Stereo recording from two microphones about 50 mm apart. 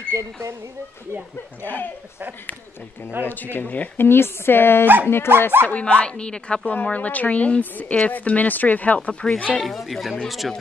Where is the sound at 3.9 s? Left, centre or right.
Left.